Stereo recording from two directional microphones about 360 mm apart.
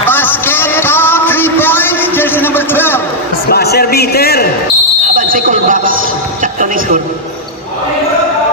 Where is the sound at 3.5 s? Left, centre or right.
Left.